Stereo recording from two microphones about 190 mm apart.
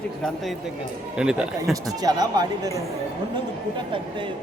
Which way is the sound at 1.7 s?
20° right (ahead or behind).